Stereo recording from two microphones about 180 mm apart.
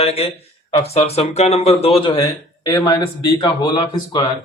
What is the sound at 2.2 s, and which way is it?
Speech, 15° left (ahead or behind).